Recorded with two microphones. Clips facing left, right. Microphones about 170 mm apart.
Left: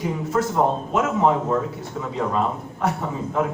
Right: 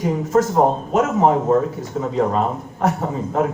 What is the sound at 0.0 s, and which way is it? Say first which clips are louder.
Speech: right 5 dB; 40° right (ahead or behind).